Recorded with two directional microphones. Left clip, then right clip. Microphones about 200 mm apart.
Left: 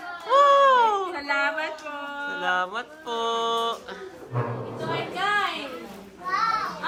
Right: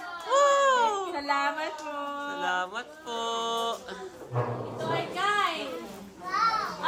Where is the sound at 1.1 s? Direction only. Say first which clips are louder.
Left 3 dB; 55° right (ahead or behind).